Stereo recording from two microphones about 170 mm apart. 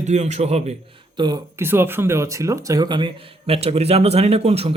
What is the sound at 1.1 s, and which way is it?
Speech, 25° right (ahead or behind).